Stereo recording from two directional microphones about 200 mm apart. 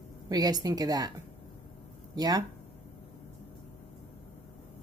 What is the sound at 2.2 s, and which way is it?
Speech, 20° right (ahead or behind).